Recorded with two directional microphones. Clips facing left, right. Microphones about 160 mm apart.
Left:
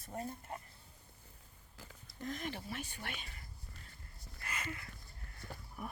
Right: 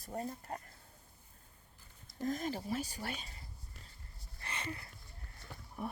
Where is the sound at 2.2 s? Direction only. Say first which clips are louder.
Right 5 dB; 40° right (ahead or behind).